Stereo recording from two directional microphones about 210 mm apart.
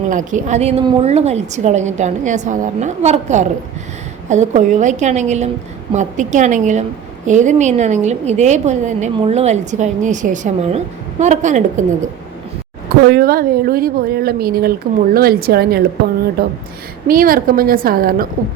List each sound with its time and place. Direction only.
0.1 s a woman's voice: 40° right (ahead or behind)
13.1 s speech: 45° right (ahead or behind)